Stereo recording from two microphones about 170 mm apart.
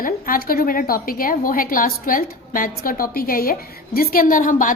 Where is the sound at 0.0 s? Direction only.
60° left (ahead or behind).